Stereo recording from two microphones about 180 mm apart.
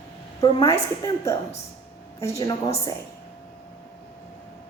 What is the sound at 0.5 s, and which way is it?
Speech, 35° left (ahead or behind).